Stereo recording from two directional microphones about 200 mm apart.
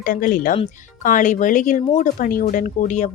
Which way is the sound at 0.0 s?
45° left (ahead or behind).